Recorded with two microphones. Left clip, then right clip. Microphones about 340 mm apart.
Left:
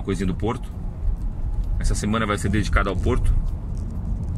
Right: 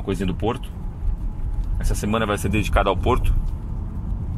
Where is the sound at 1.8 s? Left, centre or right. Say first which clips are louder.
Right 2 dB; centre.